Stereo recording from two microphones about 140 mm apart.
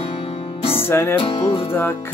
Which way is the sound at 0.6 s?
40° left (ahead or behind).